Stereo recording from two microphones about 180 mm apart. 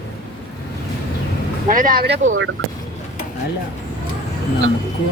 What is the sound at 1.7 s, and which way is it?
Speech, 50° right (ahead or behind).